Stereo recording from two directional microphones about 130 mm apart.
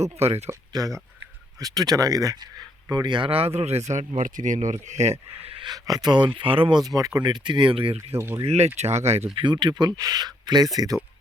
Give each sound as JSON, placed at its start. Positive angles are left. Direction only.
{"t": 0.2, "sound": "speech", "side_deg": -55}
{"t": 0.7, "sound": "speech", "side_deg": -25}
{"t": 4.2, "sound": "speech", "side_deg": -75}
{"t": 5.6, "sound": "speech", "side_deg": -30}
{"t": 8.1, "sound": "speech", "side_deg": -20}
{"t": 8.4, "sound": "speech", "side_deg": -55}
{"t": 9.4, "sound": "speech", "side_deg": -35}